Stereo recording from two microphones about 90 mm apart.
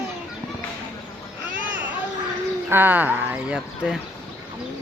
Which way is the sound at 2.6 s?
20° right (ahead or behind).